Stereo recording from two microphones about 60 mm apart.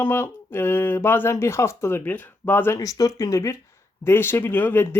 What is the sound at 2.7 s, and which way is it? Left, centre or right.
Speech, left.